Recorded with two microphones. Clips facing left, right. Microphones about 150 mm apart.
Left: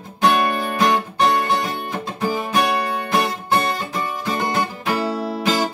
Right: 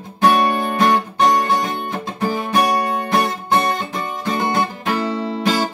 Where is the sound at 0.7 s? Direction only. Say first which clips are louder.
Right 1 dB; centre (ahead or behind).